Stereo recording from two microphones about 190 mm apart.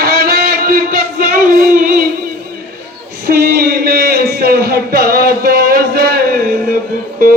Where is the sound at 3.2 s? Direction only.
50° right (ahead or behind).